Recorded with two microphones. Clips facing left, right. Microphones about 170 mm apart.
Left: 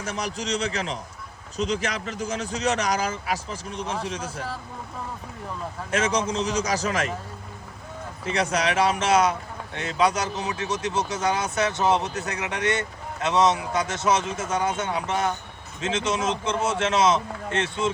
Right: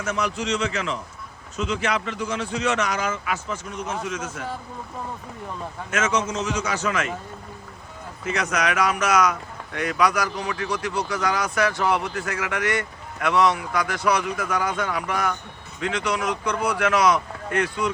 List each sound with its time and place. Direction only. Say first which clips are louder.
0.0 s speech: right 4 dB; 35° left (ahead or behind)
5.9 s speech: even; 35° left (ahead or behind)
8.2 s speech: even; 30° left (ahead or behind)